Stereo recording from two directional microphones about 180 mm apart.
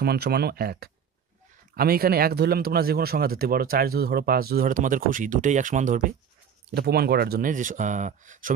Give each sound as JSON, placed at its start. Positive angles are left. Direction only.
{"t": 0.0, "sound": "speech", "side_deg": -60}
{"t": 6.7, "sound": "speech", "side_deg": -60}